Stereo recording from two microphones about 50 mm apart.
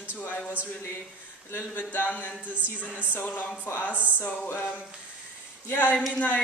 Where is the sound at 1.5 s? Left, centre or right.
Left.